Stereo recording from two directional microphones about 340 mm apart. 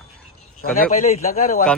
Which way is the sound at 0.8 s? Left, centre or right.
Left.